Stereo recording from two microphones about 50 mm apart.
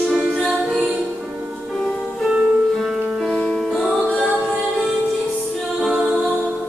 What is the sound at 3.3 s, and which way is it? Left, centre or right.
Music, centre.